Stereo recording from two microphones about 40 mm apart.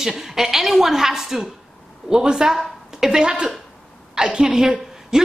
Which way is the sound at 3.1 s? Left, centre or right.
Centre.